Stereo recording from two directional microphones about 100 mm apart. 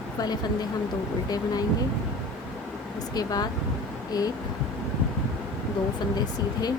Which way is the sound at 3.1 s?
40° left (ahead or behind).